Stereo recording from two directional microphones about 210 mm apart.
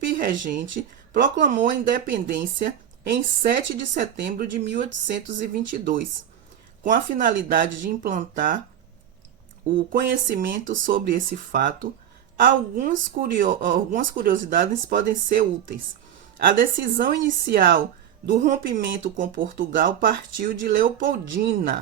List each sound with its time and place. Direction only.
0.1 s a sound: 40° right (ahead or behind)
0.4 s speech: 40° right (ahead or behind)
3.1 s a woman's voice: 60° right (ahead or behind)
3.8 s speech: 40° right (ahead or behind)
9.7 s speech: 45° right (ahead or behind)